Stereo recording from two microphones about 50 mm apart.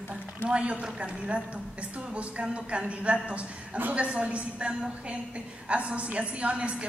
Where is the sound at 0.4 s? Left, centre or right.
Right.